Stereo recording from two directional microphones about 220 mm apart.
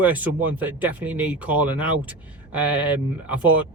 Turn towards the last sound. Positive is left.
turn(degrees=-5)  # may be behind; listen again after turning